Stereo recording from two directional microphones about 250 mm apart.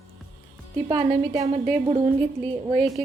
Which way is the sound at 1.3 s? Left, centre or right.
Centre.